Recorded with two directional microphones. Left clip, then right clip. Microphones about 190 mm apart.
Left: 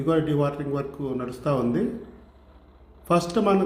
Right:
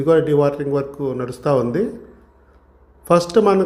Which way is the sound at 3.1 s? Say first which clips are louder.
Right 8 dB; 35° right (ahead or behind).